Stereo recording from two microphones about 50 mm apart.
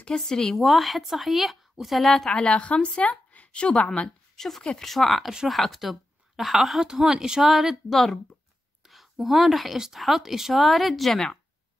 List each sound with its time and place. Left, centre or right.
0.2 s speech: centre
0.6 s speech: centre
2.4 s speech: left
4.4 s a woman's voice: centre